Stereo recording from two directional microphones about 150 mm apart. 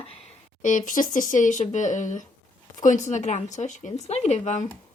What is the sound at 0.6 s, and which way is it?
A woman's voice, 60° left (ahead or behind).